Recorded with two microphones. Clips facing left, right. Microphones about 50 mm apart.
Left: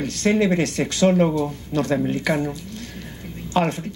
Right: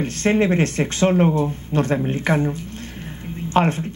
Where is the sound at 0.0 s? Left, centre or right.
Right.